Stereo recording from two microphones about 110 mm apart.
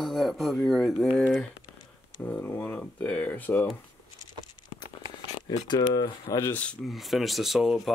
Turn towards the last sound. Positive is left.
turn(degrees=0)  # may be behind; listen again after turning